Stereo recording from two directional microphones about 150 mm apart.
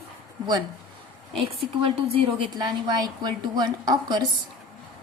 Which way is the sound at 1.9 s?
40° right (ahead or behind).